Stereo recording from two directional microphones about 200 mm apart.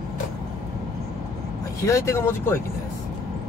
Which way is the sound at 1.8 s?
15° left (ahead or behind).